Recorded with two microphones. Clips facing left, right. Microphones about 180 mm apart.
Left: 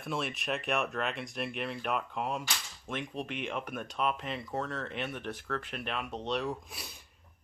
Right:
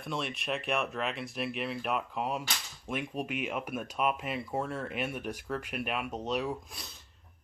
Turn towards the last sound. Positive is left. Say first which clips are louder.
# left 1 dB
turn(degrees=10)  # may be behind; listen again after turning